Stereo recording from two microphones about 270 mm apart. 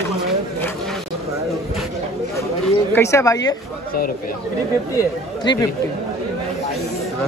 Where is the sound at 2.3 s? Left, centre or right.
Centre.